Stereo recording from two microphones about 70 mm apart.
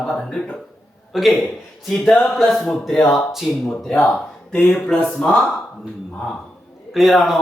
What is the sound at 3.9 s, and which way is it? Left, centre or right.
Speech, left.